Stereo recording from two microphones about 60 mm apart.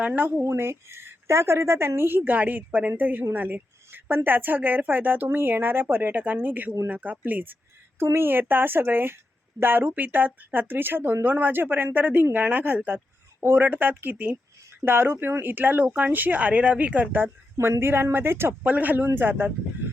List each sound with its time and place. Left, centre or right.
0.0 s speech: right
0.4 s speech: right
8.0 s speech: right
17.6 s speech: right
18.6 s speech: right